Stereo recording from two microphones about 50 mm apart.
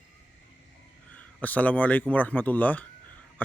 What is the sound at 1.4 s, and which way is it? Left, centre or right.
Speech, left.